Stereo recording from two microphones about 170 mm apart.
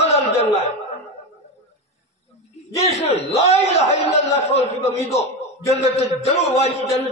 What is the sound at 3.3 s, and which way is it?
A man's voice, 40° left (ahead or behind).